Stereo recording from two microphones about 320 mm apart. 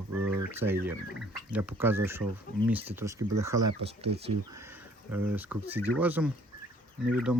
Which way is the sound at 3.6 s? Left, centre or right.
Right.